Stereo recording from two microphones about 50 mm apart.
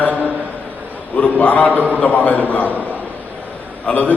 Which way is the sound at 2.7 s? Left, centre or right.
Right.